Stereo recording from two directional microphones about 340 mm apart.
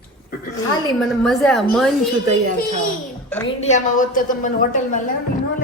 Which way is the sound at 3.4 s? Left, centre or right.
Centre.